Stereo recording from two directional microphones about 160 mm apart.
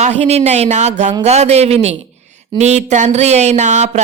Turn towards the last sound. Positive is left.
turn(degrees=-50)  # may be behind; listen again after turning